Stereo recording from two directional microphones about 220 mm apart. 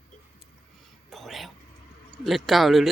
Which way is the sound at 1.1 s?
Centre (ahead or behind).